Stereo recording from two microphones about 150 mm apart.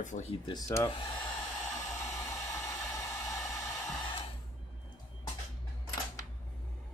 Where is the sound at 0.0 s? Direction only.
55° left (ahead or behind).